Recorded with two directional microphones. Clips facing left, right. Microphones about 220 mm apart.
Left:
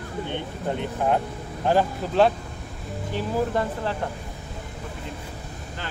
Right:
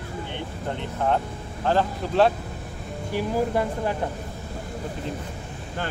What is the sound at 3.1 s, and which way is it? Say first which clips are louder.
Speech: right 1 dB; 10° right (ahead or behind).